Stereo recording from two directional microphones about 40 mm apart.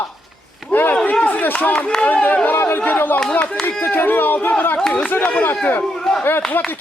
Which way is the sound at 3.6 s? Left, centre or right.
Left.